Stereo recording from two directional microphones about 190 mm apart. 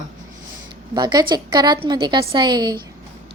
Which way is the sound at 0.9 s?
20° right (ahead or behind).